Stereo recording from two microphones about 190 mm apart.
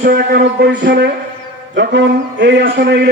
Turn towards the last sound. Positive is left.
turn(degrees=-60)  # may be behind; listen again after turning